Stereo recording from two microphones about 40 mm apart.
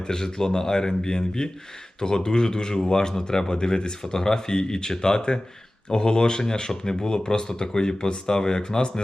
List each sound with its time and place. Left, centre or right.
0.0 s speech: centre